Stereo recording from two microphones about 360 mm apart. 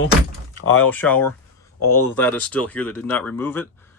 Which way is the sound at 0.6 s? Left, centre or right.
Left.